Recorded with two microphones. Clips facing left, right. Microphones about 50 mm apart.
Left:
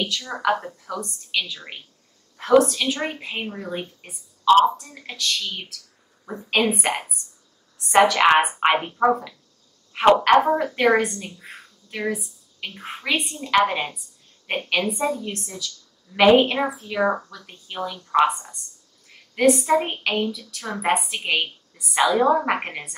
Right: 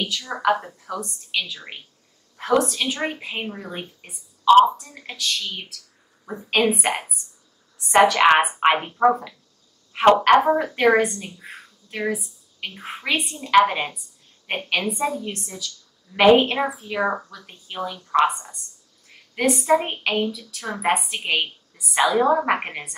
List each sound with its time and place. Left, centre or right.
0.0 s a woman's voice: centre